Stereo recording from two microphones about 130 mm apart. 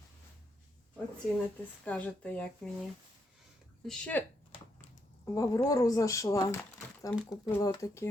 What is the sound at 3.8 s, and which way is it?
Speech, 5° left (ahead or behind).